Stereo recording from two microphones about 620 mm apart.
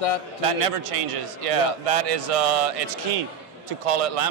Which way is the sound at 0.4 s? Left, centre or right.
Right.